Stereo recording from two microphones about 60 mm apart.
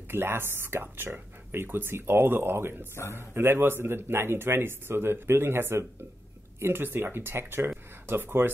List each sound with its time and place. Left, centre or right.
0.1 s speech: right